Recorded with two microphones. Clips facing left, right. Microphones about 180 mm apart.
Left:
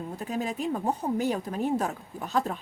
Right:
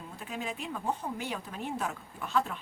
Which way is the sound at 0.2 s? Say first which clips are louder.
Left 6 dB; 40° left (ahead or behind).